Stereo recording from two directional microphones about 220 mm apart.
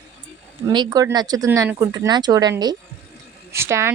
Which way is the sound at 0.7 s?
20° right (ahead or behind).